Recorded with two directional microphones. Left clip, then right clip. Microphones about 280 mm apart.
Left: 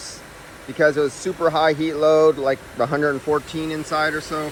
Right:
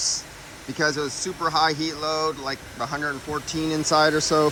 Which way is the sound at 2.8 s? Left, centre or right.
Left.